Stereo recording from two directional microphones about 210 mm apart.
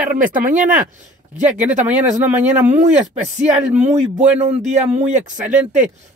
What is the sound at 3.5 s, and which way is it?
Speech, 35° right (ahead or behind).